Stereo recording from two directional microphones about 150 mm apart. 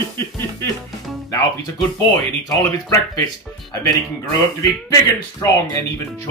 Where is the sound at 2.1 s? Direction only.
25° left (ahead or behind).